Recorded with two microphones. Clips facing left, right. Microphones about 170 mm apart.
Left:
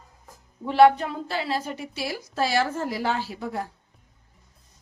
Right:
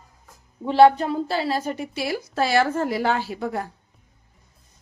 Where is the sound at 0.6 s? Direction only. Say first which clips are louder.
Right 2 dB; 25° right (ahead or behind); by 3.6 s 60° right (ahead or behind).